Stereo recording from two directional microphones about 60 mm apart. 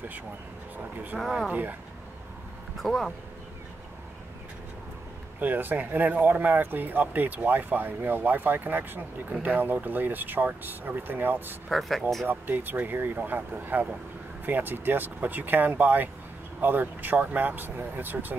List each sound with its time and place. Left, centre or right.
1.5 s speech: right
2.8 s speech: centre
5.4 s speech: right